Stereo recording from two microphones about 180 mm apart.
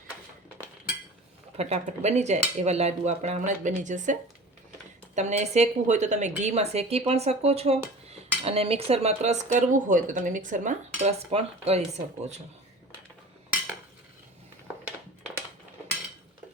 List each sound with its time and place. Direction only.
1.5 s speech: 35° right (ahead or behind)